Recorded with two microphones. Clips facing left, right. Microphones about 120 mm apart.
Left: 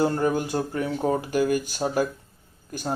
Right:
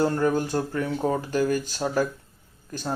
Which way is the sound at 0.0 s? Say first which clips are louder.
Even; 15° left (ahead or behind).